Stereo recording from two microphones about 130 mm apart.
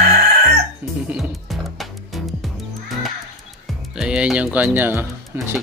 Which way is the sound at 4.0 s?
5° right (ahead or behind).